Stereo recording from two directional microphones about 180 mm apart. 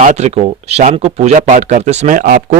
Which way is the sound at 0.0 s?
40° right (ahead or behind).